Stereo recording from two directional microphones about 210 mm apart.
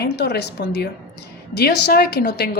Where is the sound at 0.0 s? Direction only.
50° left (ahead or behind).